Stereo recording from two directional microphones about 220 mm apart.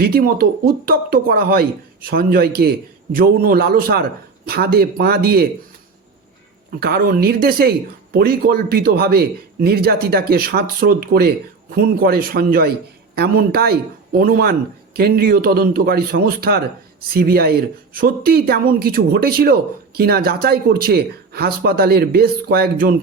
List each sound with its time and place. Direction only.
0.0 s speech: 40° right (ahead or behind)
6.7 s speech: 45° right (ahead or behind)